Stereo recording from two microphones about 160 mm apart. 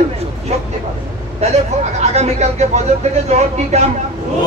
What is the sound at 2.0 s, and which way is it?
A man's voice, 45° right (ahead or behind).